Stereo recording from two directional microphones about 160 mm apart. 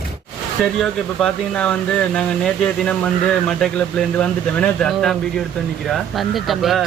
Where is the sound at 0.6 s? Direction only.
5° left (ahead or behind).